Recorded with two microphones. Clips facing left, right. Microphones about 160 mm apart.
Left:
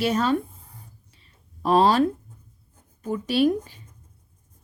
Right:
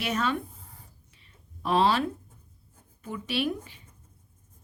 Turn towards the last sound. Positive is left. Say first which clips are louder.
# left 9 dB
turn(degrees=40)  # may be behind; listen again after turning